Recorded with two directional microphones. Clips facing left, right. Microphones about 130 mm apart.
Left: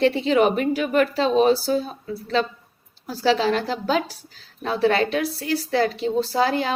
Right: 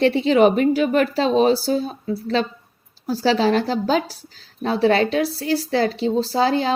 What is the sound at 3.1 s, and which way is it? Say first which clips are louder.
A woman's voice: right 2 dB; 35° right (ahead or behind).